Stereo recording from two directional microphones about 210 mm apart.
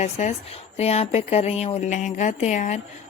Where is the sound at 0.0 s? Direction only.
30° left (ahead or behind).